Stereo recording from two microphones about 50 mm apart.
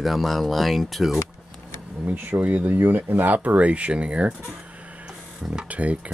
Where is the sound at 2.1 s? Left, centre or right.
Right.